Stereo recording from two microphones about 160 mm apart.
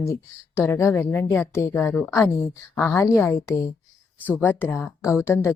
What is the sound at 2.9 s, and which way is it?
A woman's voice, 15° left (ahead or behind).